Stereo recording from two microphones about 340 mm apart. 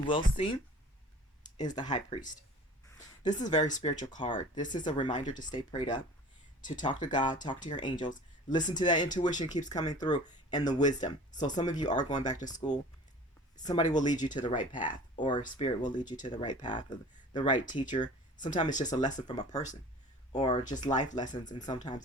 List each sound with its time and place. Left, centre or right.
0.1 s speech: centre